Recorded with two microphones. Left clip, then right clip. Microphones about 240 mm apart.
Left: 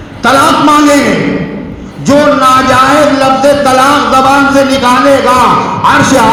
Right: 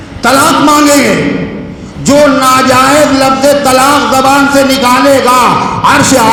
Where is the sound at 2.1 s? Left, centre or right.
Right.